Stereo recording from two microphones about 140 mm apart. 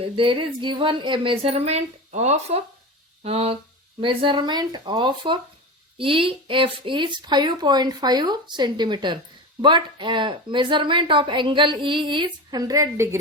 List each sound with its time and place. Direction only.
0.0 s a woman's voice: 40° right (ahead or behind); by 13.1 s 20° right (ahead or behind)